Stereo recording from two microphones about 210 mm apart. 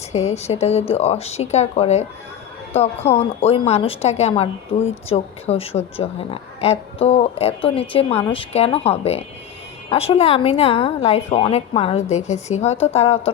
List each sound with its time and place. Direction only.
0.1 s speech: 30° left (ahead or behind)